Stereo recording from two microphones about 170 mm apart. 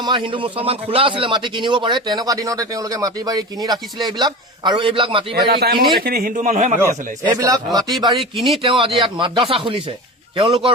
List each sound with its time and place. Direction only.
0.0 s a man's voice: 25° right (ahead or behind)
5.3 s a man's voice: 65° right (ahead or behind); by 6.7 s 45° right (ahead or behind)
7.3 s a man's voice: 20° right (ahead or behind)
8.1 s speech: centre (ahead or behind)
8.6 s a man's voice: 30° right (ahead or behind)